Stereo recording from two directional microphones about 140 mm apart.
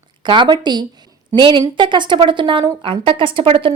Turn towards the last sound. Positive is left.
turn(degrees=-40)  # may be behind; listen again after turning